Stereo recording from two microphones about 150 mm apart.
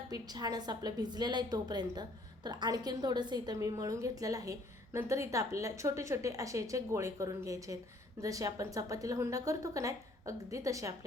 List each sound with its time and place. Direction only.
0.1 s a woman's voice: 25° right (ahead or behind)